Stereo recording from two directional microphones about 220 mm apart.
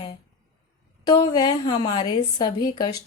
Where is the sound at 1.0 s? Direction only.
20° left (ahead or behind).